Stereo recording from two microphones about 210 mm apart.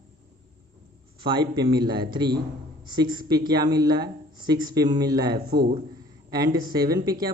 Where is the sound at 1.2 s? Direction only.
20° right (ahead or behind).